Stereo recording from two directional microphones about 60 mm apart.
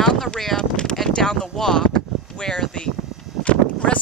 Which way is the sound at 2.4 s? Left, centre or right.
Centre.